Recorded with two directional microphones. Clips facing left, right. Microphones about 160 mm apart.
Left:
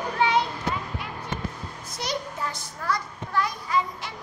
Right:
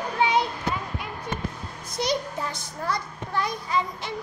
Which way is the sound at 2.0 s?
20° right (ahead or behind).